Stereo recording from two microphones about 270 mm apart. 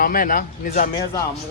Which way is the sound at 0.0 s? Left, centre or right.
Left.